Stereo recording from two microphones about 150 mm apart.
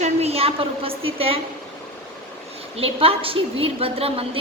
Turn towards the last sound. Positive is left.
turn(degrees=-40)  # may be behind; listen again after turning